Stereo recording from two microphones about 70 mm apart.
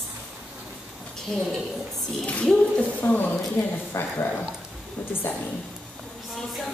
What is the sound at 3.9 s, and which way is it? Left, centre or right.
Speech, left.